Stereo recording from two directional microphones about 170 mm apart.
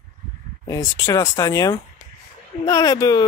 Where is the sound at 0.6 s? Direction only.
20° left (ahead or behind).